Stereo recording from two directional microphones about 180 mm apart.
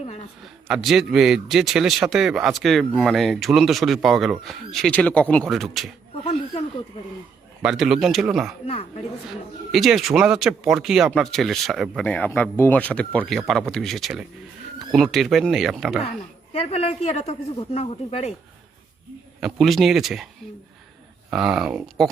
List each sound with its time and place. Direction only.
0.4 s speech: centre (ahead or behind)
7.6 s speech: 5° right (ahead or behind)
8.6 s speech: 35° left (ahead or behind)
9.7 s speech: centre (ahead or behind)
16.5 s speech: 35° left (ahead or behind)
19.4 s speech: centre (ahead or behind)
21.2 s speech: 5° right (ahead or behind)